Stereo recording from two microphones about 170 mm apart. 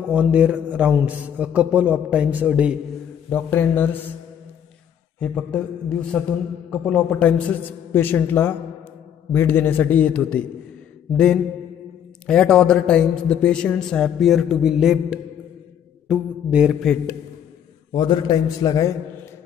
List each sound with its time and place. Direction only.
0.1 s a man's voice: 10° right (ahead or behind)
3.3 s a man's voice: 10° left (ahead or behind)
5.2 s a man's voice: 5° left (ahead or behind)
12.3 s a man's voice: 5° left (ahead or behind)
17.9 s a man's voice: 25° left (ahead or behind)